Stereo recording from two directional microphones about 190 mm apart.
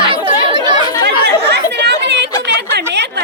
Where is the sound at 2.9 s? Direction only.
65° right (ahead or behind).